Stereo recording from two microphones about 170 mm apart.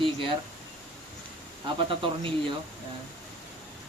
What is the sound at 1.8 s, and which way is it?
Speech, 30° right (ahead or behind).